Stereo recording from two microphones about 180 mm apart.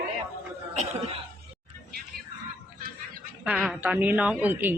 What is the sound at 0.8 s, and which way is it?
Cough, 35° right (ahead or behind).